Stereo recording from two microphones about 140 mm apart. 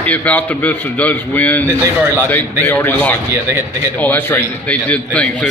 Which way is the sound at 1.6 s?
20° right (ahead or behind).